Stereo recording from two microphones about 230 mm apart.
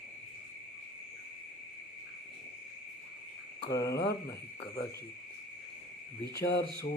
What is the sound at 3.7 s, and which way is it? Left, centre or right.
Owl, centre.